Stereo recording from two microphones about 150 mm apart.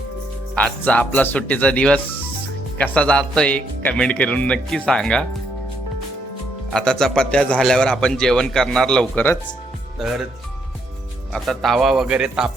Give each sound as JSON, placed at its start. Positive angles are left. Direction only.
{"t": 0.5, "sound": "speech", "side_deg": 10}
{"t": 6.7, "sound": "a man's voice", "side_deg": 5}
{"t": 10.0, "sound": "a man's voice", "side_deg": 0}
{"t": 11.3, "sound": "a man's voice", "side_deg": 0}